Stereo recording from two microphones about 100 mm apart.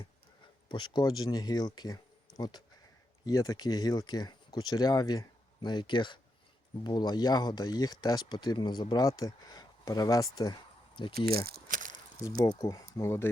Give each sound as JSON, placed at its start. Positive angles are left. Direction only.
{"t": 0.7, "sound": "speech", "side_deg": 50}
{"t": 12.2, "sound": "speech", "side_deg": 35}